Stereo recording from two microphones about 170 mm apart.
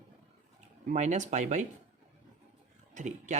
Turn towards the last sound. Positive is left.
turn(degrees=-45)  # may be behind; listen again after turning